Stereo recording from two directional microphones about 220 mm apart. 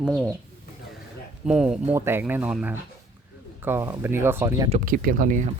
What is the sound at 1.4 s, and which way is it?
Speech, 5° right (ahead or behind).